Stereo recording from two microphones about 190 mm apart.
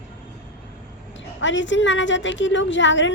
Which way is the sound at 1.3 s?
75° left (ahead or behind).